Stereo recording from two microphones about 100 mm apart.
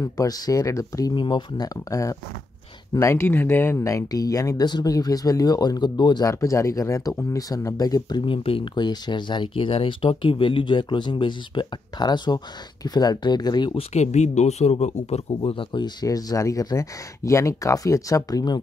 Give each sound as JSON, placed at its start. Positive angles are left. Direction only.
{"t": 0.0, "sound": "speech", "side_deg": 35}
{"t": 1.1, "sound": "speech", "side_deg": 50}
{"t": 6.2, "sound": "speech", "side_deg": 35}
{"t": 8.3, "sound": "speech", "side_deg": 60}
{"t": 8.8, "sound": "speech", "side_deg": 45}
{"t": 14.5, "sound": "speech", "side_deg": 90}